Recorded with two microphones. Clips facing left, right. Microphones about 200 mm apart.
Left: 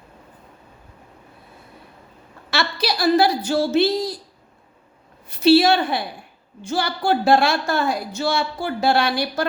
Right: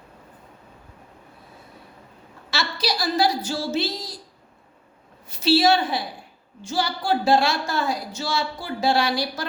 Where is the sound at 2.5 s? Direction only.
60° left (ahead or behind).